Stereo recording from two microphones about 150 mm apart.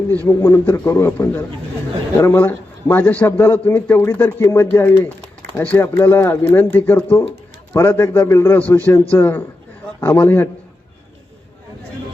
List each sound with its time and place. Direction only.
0.3 s a man's voice: 20° left (ahead or behind)